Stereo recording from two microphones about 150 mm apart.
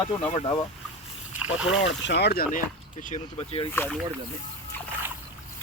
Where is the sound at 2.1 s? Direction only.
90° left.